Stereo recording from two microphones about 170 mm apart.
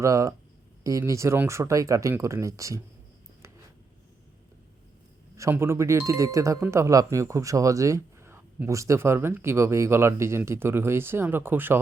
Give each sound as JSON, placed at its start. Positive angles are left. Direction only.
{"t": 0.0, "sound": "speech", "side_deg": -20}
{"t": 5.4, "sound": "speech", "side_deg": -15}